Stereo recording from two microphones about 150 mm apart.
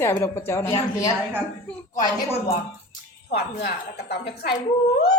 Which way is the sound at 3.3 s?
90° left.